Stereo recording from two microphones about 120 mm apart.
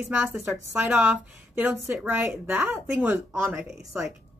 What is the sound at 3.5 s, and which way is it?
Speech, 5° right (ahead or behind).